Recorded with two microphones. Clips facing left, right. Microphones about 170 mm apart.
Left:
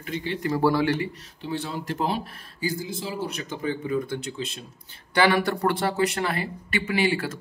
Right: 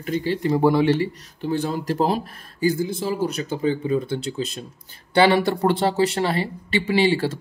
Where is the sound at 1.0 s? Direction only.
45° right (ahead or behind).